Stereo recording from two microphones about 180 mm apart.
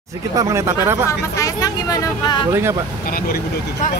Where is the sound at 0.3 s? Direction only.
15° right (ahead or behind).